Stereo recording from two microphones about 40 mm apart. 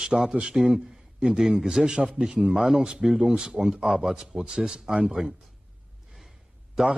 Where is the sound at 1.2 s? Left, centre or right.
Centre.